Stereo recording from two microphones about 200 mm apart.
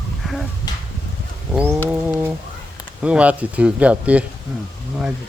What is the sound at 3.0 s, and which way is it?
Speech, 5° right (ahead or behind).